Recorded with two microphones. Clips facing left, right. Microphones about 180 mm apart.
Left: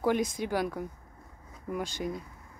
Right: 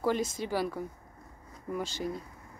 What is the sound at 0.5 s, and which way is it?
Speech, 5° right (ahead or behind).